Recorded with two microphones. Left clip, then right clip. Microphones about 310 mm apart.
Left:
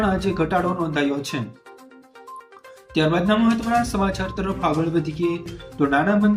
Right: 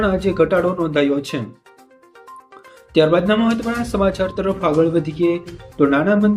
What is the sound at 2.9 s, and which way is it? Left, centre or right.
Speech, centre.